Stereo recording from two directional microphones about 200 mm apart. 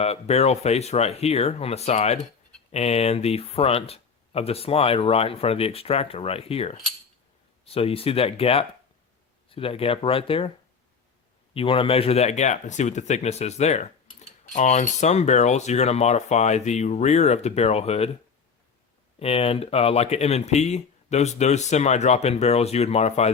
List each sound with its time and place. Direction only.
0.0 s speech: 30° left (ahead or behind)
11.5 s speech: 25° left (ahead or behind)
19.2 s speech: 30° left (ahead or behind)